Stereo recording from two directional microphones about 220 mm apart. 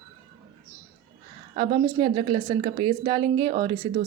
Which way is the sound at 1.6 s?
25° right (ahead or behind).